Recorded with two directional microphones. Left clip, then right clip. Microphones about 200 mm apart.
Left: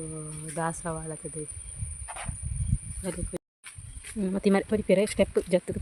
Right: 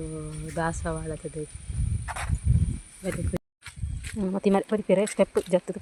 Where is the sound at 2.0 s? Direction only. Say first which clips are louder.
Right 5 dB; 65° right (ahead or behind).